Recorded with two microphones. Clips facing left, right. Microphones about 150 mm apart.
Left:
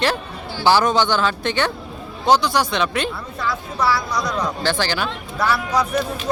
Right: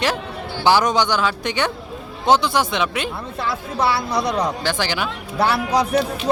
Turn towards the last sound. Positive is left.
turn(degrees=-30)  # may be behind; listen again after turning